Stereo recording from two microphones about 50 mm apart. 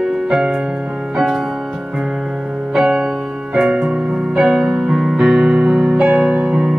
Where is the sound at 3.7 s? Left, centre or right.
Centre.